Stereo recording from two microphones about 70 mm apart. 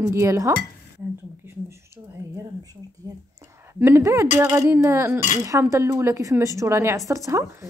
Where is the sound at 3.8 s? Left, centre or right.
Right.